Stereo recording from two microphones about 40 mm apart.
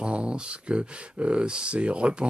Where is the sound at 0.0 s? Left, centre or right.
Right.